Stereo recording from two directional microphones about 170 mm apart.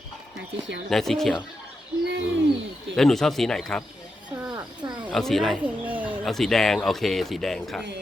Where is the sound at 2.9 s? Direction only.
Centre (ahead or behind).